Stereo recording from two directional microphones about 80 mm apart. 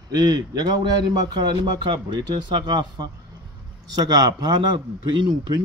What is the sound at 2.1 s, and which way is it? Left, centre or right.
Speech, right.